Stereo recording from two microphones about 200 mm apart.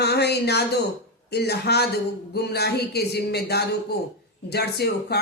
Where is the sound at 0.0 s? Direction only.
55° left (ahead or behind).